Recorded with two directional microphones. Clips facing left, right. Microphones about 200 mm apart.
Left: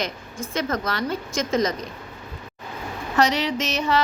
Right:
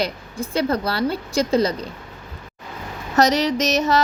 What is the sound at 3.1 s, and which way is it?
Speech, 40° right (ahead or behind).